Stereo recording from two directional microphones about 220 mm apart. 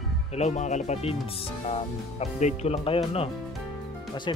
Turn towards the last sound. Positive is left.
turn(degrees=25)  # may be behind; listen again after turning